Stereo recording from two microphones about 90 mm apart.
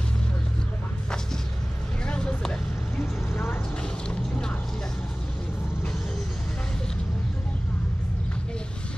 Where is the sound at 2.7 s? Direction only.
30° left (ahead or behind).